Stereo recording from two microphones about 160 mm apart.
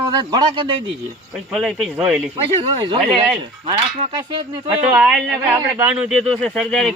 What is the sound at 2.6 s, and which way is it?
Speech, 30° right (ahead or behind).